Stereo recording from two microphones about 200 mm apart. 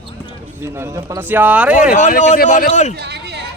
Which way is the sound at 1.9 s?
35° left (ahead or behind).